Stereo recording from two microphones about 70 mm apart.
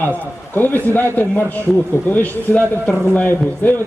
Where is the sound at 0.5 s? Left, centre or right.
Left.